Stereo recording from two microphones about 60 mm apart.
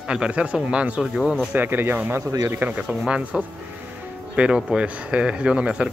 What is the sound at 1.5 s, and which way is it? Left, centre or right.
Speech, right.